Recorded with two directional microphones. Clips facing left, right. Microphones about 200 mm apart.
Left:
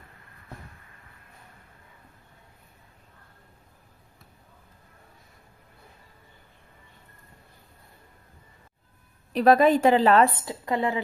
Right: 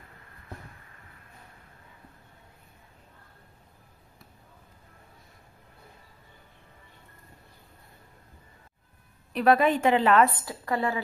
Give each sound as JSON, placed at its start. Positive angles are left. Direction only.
{"t": 9.3, "sound": "a woman's voice", "side_deg": 40}